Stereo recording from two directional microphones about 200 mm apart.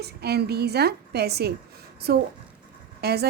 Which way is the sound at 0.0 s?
55° right (ahead or behind).